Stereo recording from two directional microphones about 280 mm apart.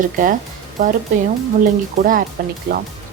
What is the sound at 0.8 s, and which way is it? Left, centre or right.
Speech, right.